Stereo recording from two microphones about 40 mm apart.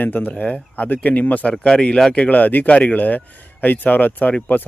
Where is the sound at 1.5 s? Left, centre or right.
Left.